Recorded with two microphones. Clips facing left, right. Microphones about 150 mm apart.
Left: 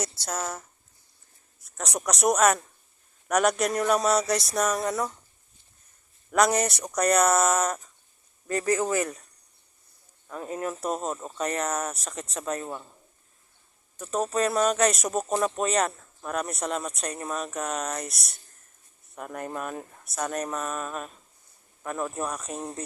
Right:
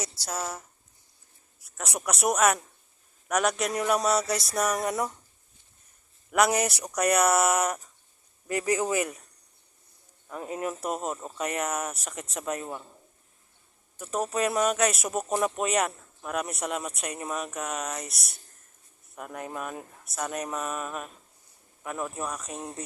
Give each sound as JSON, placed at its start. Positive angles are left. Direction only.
{"t": 0.0, "sound": "a man's voice", "side_deg": -5}
{"t": 4.8, "sound": "speech", "side_deg": -15}
{"t": 6.3, "sound": "speech", "side_deg": -5}
{"t": 10.2, "sound": "speech", "side_deg": -10}
{"t": 13.9, "sound": "speech", "side_deg": -10}